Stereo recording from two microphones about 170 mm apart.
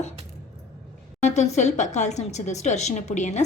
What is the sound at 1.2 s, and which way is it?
A woman's voice, 40° left (ahead or behind).